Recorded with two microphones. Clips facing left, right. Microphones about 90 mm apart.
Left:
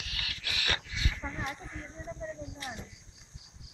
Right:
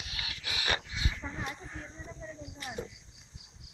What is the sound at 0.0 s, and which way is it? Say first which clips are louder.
Goat: left 1 dB; 20° right (ahead or behind).